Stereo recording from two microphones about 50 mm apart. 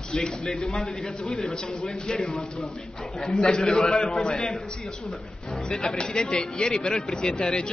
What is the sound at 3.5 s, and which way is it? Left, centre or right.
A man's voice, centre.